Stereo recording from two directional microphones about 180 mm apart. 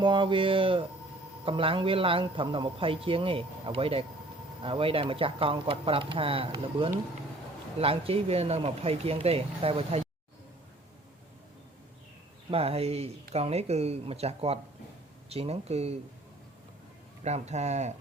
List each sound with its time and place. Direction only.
0.0 s a man's voice: 25° right (ahead or behind)
12.5 s speech: 35° right (ahead or behind)
17.2 s speech: 40° right (ahead or behind)